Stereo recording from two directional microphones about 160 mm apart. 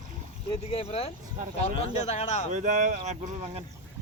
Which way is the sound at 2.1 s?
45° left (ahead or behind).